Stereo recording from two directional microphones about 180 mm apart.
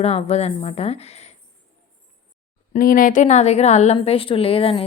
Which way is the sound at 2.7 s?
50° left (ahead or behind).